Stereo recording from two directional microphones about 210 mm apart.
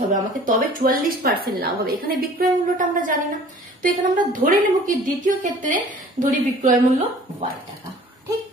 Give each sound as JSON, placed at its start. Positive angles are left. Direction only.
{"t": 0.1, "sound": "a woman's voice", "side_deg": -40}